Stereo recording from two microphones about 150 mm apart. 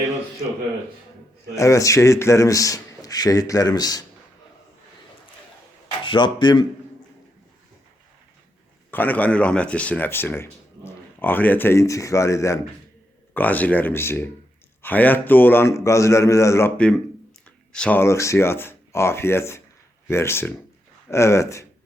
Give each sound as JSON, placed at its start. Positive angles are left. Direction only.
{"t": 1.5, "sound": "a man's voice", "side_deg": 20}
{"t": 6.1, "sound": "speech", "side_deg": 30}
{"t": 8.9, "sound": "speech", "side_deg": 10}
{"t": 17.7, "sound": "a man's voice", "side_deg": 5}